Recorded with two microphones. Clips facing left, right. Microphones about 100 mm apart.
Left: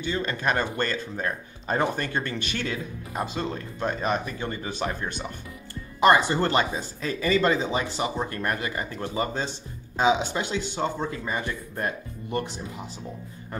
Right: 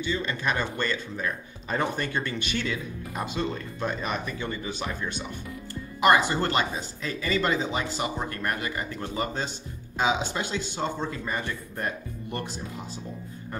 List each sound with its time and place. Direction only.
0.0 s speech: 40° left (ahead or behind); by 12.4 s 20° left (ahead or behind)